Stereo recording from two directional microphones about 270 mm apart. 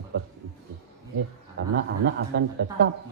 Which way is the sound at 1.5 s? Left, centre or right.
Right.